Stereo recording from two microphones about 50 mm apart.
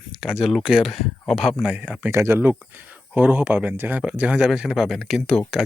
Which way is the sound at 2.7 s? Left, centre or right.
Right.